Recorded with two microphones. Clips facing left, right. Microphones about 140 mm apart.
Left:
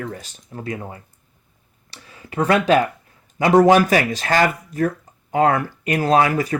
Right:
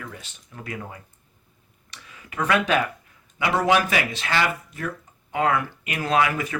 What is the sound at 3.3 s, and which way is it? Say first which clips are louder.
Speech: left 8 dB; 40° left (ahead or behind).